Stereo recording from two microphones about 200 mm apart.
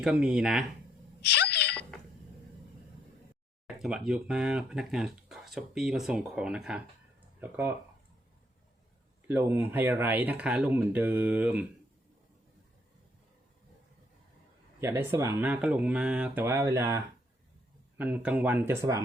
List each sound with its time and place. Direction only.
0.0 s speech: 5° right (ahead or behind)
1.2 s a sound: 55° left (ahead or behind)
3.8 s speech: 5° right (ahead or behind)
9.2 s speech: 10° right (ahead or behind)
14.8 s speech: 10° right (ahead or behind)